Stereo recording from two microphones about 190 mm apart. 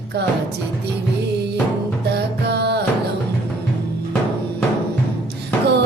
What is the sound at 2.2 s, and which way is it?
Music, 60° right (ahead or behind).